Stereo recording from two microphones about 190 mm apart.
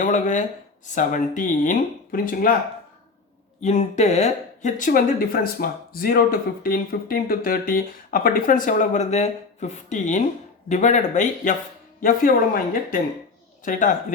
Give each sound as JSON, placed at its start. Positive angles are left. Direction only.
{"t": 0.0, "sound": "speech", "side_deg": 40}
{"t": 3.6, "sound": "speech", "side_deg": 35}
{"t": 13.7, "sound": "speech", "side_deg": 45}